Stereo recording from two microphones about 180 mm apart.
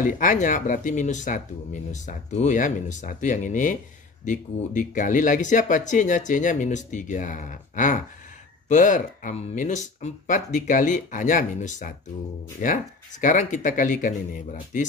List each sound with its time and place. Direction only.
0.0 s speech: 45° left (ahead or behind)